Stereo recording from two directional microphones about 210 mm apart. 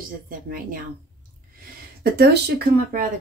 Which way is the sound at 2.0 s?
50° right (ahead or behind).